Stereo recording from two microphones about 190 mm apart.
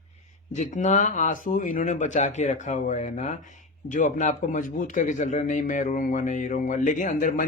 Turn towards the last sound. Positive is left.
turn(degrees=45)  # may be behind; listen again after turning